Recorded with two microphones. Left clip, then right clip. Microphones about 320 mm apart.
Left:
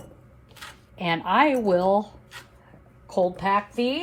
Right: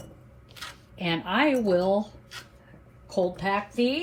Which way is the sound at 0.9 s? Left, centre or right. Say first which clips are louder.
Left 5 dB; left.